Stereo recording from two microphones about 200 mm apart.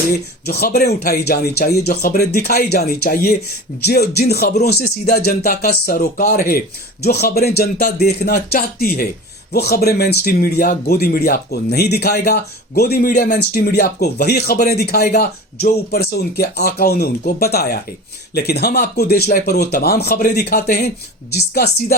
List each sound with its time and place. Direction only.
0.4 s speech: 50° left (ahead or behind)